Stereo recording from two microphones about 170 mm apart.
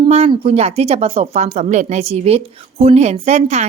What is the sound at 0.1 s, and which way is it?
Speech, 35° right (ahead or behind).